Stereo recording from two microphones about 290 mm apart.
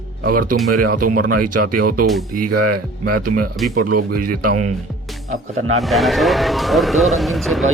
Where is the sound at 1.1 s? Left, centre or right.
Right.